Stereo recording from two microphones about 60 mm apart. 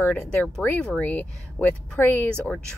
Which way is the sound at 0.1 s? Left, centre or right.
Left.